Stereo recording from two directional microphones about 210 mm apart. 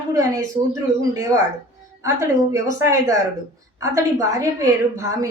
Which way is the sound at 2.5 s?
15° right (ahead or behind).